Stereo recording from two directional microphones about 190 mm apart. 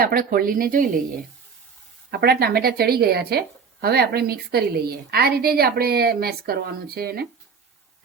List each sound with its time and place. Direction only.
0.0 s speech: 50° right (ahead or behind)
2.0 s speech: 55° right (ahead or behind)